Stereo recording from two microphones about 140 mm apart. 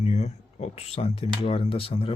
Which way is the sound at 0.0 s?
50° left (ahead or behind).